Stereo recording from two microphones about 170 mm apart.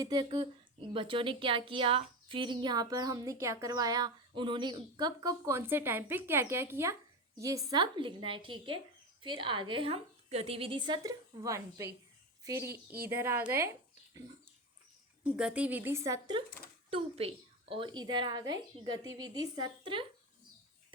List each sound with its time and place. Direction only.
0.0 s a woman's voice: 25° right (ahead or behind)
15.2 s a woman's voice: 5° right (ahead or behind)
16.9 s a woman's voice: 35° right (ahead or behind)